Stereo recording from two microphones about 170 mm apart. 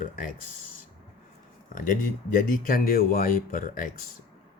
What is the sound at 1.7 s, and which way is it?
Speech, 50° left (ahead or behind).